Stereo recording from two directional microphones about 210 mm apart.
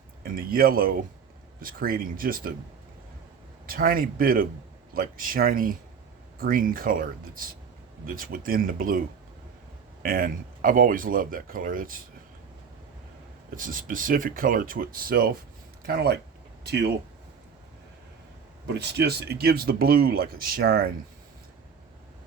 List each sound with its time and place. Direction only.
0.2 s speech: 45° right (ahead or behind)
3.7 s speech: 45° right (ahead or behind)
13.6 s speech: 40° right (ahead or behind)
18.7 s speech: 50° right (ahead or behind)